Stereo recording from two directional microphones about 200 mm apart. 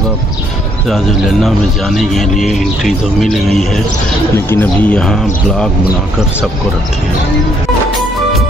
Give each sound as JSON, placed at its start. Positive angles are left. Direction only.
{"t": 0.8, "sound": "speech", "side_deg": 0}